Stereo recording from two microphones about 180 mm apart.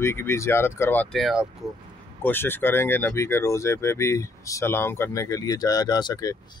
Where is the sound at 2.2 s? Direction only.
10° left (ahead or behind).